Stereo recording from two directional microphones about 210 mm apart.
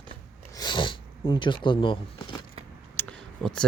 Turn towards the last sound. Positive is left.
turn(degrees=5)  # may be behind; listen again after turning